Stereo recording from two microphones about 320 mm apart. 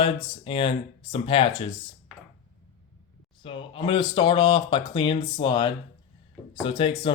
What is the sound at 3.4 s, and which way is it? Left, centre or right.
Speech, centre.